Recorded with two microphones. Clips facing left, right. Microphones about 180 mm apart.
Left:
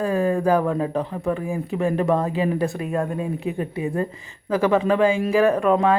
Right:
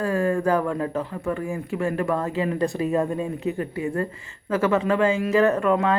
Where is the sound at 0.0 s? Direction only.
15° left (ahead or behind).